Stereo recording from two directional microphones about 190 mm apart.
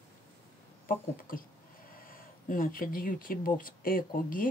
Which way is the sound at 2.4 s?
45° left (ahead or behind).